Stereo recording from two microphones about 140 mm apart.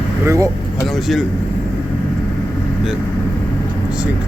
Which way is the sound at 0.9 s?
Centre (ahead or behind).